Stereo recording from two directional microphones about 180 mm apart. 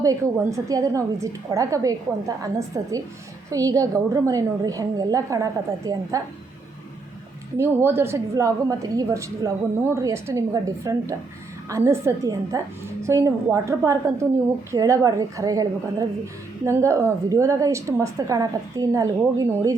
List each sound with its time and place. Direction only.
0.0 s a woman's voice: 20° right (ahead or behind)
7.6 s a woman's voice: 15° right (ahead or behind)